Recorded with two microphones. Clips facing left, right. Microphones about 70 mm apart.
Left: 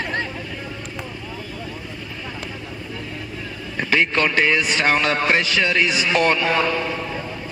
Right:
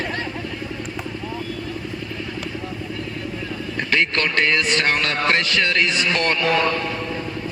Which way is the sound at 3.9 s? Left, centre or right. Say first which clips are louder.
Left 2 dB; centre.